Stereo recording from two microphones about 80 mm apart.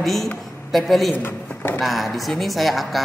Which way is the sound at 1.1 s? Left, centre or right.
Left.